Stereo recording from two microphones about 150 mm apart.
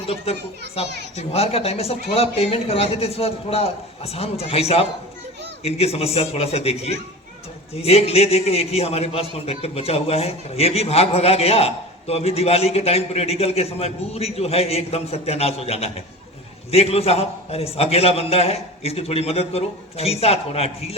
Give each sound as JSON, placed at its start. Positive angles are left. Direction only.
{"t": 0.8, "sound": "a man's voice", "side_deg": 45}